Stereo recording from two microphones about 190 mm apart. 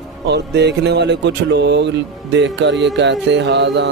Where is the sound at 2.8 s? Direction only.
70° right (ahead or behind).